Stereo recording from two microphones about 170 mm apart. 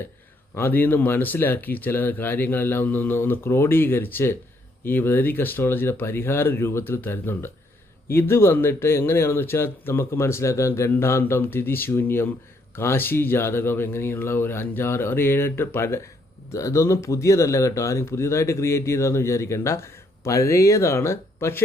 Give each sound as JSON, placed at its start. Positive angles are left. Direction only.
{"t": 0.5, "sound": "speech", "side_deg": 10}